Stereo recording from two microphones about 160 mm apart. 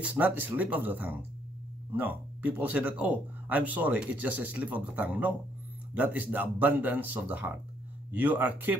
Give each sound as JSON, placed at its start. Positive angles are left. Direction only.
{"t": 0.0, "sound": "speech", "side_deg": -10}